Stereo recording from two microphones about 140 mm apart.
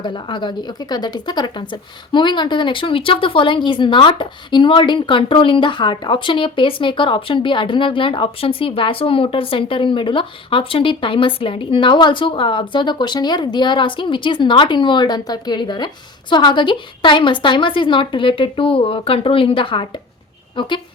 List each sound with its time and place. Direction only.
0.0 s a woman's voice: 35° left (ahead or behind)